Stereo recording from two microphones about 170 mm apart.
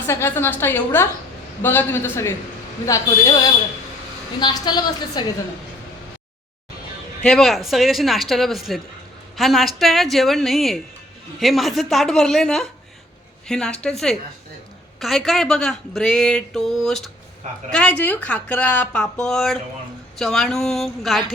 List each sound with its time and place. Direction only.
0.1 s a woman's voice: 15° left (ahead or behind)
7.2 s speech: 5° left (ahead or behind)